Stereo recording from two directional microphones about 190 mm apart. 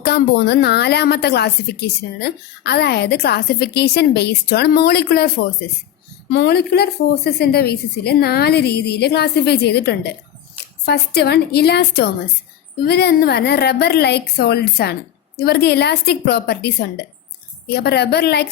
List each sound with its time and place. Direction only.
0.0 s a woman's voice: 60° left (ahead or behind)
6.3 s a woman's voice: 60° left (ahead or behind)